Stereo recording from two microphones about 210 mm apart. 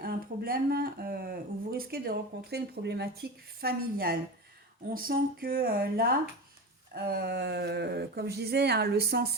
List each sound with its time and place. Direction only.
0.0 s speech: 45° right (ahead or behind)